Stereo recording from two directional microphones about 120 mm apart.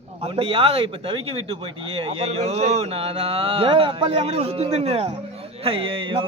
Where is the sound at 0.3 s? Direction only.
50° right (ahead or behind).